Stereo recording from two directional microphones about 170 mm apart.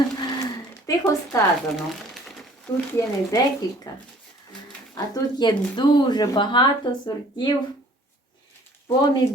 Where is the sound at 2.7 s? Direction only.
15° left (ahead or behind).